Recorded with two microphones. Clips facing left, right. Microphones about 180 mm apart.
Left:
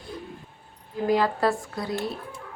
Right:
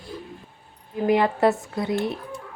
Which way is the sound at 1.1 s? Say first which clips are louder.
Right 3 dB; 20° right (ahead or behind).